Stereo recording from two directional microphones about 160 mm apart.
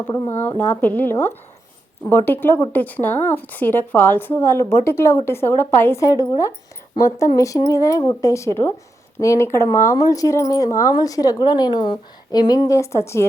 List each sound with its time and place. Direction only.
0.1 s a woman's voice: 15° left (ahead or behind)